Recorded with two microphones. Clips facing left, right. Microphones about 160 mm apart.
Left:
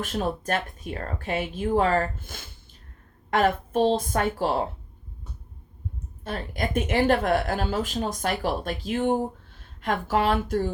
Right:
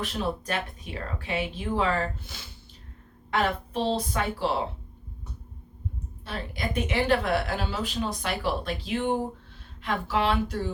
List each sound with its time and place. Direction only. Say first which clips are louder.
0.0 s a woman's voice: left 2 dB; 50° left (ahead or behind)
6.2 s a woman's voice: left 3 dB; 50° left (ahead or behind)